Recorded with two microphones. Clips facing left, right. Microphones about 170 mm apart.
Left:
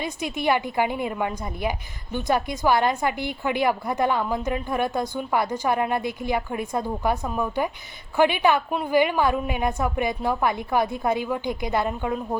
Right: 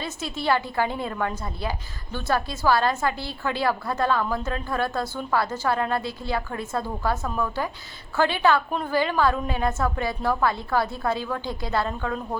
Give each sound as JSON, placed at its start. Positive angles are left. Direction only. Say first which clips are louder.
{"t": 0.0, "sound": "a woman's voice", "louder": "left 3 dB", "side_deg": 15}